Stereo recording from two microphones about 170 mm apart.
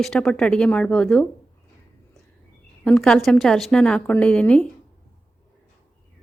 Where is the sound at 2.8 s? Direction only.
5° left (ahead or behind).